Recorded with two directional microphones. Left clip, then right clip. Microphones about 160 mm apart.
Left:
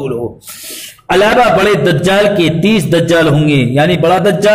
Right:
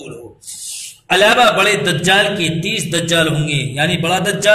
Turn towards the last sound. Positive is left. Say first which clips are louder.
# left 5 dB
turn(degrees=50)  # may be behind; listen again after turning